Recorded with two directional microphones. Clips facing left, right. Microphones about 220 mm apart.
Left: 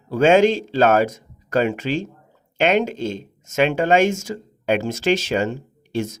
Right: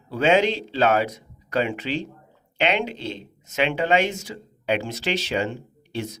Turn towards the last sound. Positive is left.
turn(degrees=45)  # may be behind; listen again after turning